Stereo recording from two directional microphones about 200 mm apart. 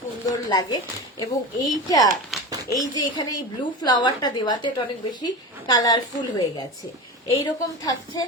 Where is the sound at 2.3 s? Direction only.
Centre (ahead or behind).